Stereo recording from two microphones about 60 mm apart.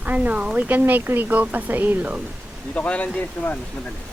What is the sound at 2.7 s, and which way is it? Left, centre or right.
Speech, left.